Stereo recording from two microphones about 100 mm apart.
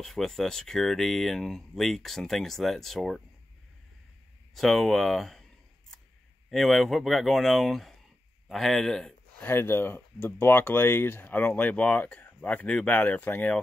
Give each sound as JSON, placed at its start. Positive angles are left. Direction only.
{"t": 0.0, "sound": "speech", "side_deg": 5}
{"t": 4.6, "sound": "a sound", "side_deg": 0}
{"t": 6.5, "sound": "speech", "side_deg": 0}
{"t": 9.4, "sound": "speech", "side_deg": 20}